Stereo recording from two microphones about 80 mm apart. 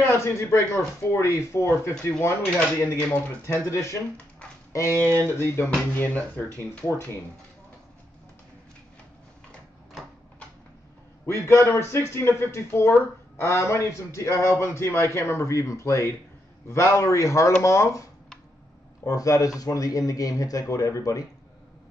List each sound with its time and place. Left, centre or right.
0.0 s a man's voice: left
5.0 s speech: right
5.4 s a man's voice: left
11.2 s a man's voice: left
19.0 s speech: left